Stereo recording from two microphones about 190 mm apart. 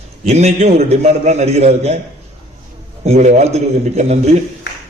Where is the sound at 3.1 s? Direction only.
35° right (ahead or behind).